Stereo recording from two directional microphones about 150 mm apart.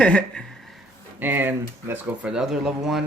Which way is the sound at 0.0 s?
5° left (ahead or behind).